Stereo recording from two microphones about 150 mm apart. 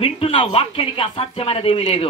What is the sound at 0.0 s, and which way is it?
Speech, 40° left (ahead or behind).